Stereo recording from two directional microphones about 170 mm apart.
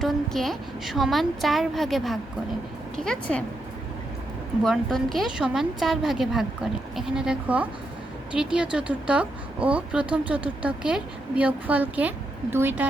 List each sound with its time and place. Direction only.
0.0 s a woman's voice: centre (ahead or behind)
4.6 s a woman's voice: centre (ahead or behind)